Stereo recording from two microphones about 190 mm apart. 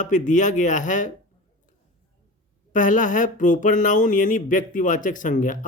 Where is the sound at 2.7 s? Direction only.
45° left (ahead or behind).